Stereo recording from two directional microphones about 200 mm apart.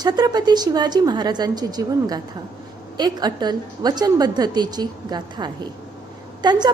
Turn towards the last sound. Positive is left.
turn(degrees=-20)  # may be behind; listen again after turning